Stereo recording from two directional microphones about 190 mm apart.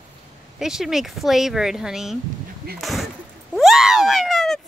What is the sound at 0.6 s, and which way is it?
Speech, centre (ahead or behind).